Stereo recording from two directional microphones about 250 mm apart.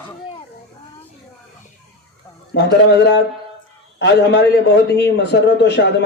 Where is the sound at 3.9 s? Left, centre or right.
Left.